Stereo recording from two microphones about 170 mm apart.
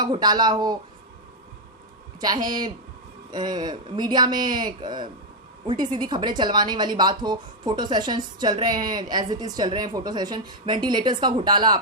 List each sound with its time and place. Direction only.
0.0 s a woman's voice: 25° right (ahead or behind)
2.2 s a woman's voice: 25° right (ahead or behind)